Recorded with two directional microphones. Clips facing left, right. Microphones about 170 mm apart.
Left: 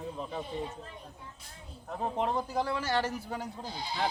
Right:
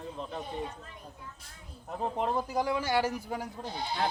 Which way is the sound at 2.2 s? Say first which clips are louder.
Even; centre (ahead or behind).